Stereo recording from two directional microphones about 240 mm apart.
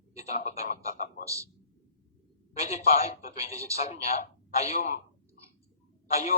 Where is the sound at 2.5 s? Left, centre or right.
Left.